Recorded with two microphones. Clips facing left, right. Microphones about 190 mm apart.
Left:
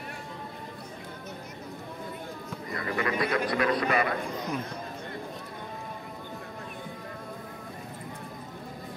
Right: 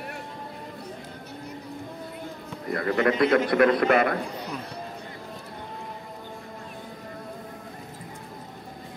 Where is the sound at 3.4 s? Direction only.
55° right (ahead or behind).